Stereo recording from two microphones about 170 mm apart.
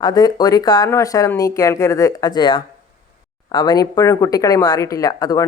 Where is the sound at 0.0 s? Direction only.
25° left (ahead or behind).